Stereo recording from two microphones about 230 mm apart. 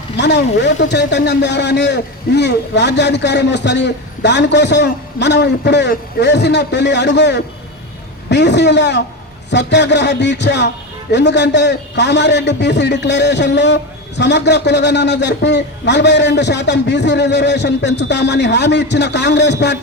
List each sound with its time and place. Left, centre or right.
0.2 s a man's voice: left